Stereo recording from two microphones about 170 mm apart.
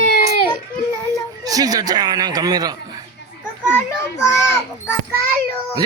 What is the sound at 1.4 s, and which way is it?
Speech, 20° right (ahead or behind).